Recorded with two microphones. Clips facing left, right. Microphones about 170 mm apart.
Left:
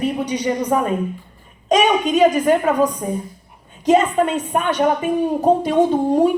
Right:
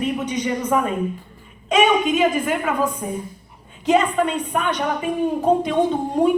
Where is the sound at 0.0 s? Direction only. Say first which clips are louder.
Left 2 dB; 35° left (ahead or behind).